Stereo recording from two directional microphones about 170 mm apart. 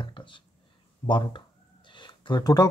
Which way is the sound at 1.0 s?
25° left (ahead or behind).